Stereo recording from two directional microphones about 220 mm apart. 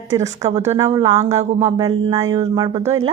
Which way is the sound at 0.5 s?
15° right (ahead or behind).